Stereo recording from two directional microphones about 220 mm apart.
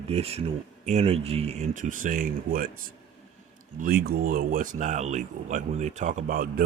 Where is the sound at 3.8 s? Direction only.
40° right (ahead or behind).